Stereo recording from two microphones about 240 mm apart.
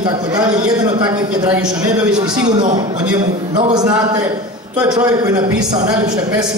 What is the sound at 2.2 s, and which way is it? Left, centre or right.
Speech, centre.